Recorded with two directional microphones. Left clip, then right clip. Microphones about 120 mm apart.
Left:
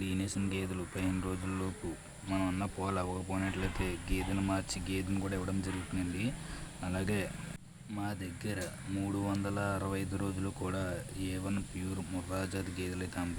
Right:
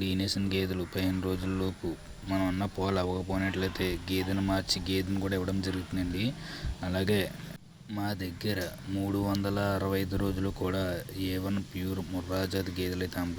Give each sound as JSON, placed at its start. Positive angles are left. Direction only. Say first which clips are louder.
{"t": 0.0, "sound": "speech", "louder": "right 6 dB", "side_deg": -25}
{"t": 2.3, "sound": "speech", "louder": "right 4 dB", "side_deg": -10}